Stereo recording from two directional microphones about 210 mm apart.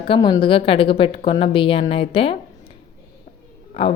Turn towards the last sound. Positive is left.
turn(degrees=25)  # may be behind; listen again after turning